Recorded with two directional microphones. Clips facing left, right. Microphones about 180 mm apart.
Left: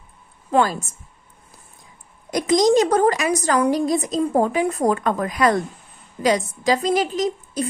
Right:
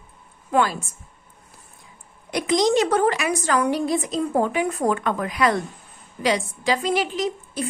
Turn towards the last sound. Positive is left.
turn(degrees=40)  # may be behind; listen again after turning